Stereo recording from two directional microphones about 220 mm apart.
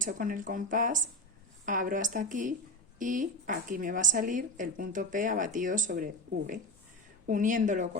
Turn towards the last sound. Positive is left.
turn(degrees=-35)  # may be behind; listen again after turning